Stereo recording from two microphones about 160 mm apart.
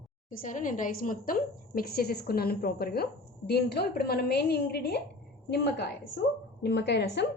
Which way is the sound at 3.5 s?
90° left.